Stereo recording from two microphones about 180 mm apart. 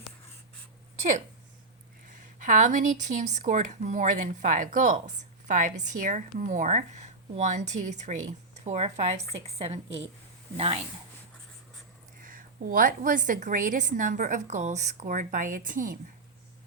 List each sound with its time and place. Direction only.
2.0 s speech: 45° right (ahead or behind)
12.2 s speech: 50° right (ahead or behind)